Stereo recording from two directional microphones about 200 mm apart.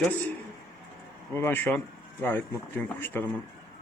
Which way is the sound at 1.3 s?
10° left (ahead or behind).